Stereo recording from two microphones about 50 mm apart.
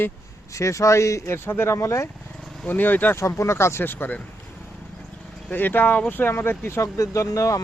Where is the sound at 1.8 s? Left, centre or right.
Left.